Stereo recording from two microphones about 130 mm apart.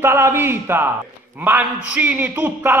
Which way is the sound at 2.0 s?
15° right (ahead or behind).